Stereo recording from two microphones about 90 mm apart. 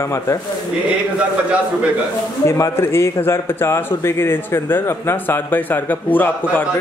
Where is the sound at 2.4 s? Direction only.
30° left (ahead or behind).